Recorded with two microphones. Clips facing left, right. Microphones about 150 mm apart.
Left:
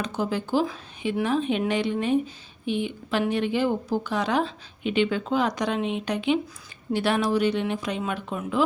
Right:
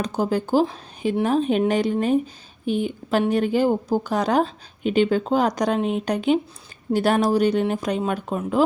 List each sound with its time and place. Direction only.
0.0 s speech: 40° right (ahead or behind)